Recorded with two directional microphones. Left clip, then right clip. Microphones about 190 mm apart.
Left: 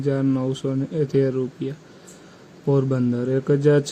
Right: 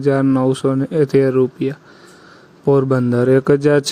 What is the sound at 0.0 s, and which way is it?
A man's voice, 40° right (ahead or behind).